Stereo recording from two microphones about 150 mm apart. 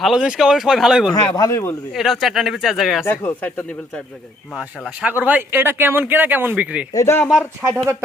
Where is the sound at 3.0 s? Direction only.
15° left (ahead or behind).